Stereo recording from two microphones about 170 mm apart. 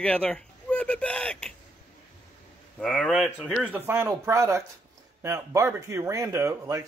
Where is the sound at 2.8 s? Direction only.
Centre (ahead or behind).